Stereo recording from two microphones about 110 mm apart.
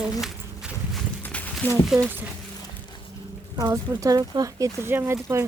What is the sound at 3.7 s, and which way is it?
Speech, 30° right (ahead or behind).